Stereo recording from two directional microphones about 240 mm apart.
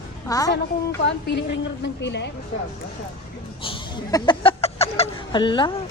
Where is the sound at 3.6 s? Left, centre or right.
Left.